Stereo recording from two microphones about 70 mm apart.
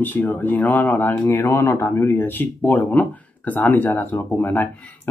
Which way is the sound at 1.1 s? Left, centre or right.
Left.